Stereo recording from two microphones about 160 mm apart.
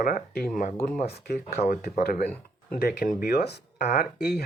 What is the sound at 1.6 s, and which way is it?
Speech, 50° left (ahead or behind).